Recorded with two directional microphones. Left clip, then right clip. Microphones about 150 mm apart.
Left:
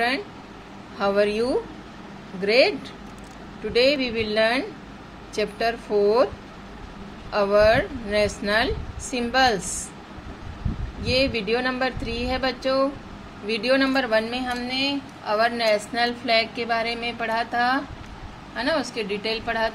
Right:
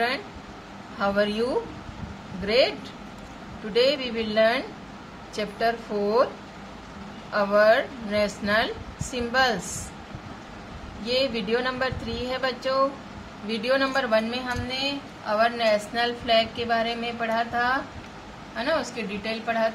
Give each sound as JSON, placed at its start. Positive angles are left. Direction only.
{"t": 0.9, "sound": "a woman's voice", "side_deg": 35}
{"t": 3.7, "sound": "a woman's voice", "side_deg": 40}
{"t": 7.3, "sound": "a woman's voice", "side_deg": 40}
{"t": 11.1, "sound": "a woman's voice", "side_deg": 35}